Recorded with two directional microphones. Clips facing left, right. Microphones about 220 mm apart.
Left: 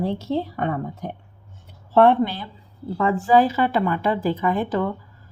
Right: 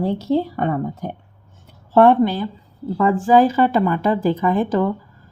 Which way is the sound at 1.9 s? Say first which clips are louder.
Right 3 dB; 45° right (ahead or behind).